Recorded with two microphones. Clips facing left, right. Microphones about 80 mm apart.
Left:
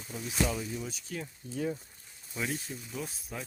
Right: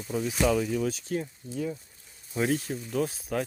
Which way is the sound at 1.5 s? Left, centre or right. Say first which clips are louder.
Right 1 dB; left.